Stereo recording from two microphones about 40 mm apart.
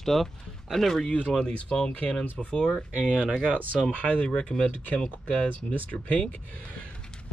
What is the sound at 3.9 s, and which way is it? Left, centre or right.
Speech, left.